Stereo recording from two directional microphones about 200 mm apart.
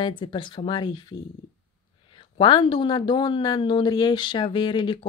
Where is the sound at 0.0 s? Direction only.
25° left (ahead or behind).